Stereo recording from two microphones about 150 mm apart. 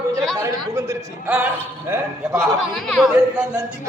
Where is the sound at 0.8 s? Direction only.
15° right (ahead or behind).